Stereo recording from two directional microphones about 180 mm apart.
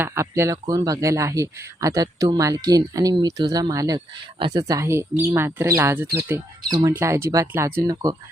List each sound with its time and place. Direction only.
0.0 s a man's voice: 15° right (ahead or behind)